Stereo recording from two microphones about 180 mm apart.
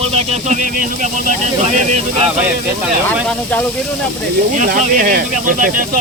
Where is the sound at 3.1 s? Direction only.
5° left (ahead or behind).